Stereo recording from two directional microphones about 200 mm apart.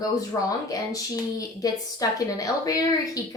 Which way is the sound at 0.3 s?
15° left (ahead or behind).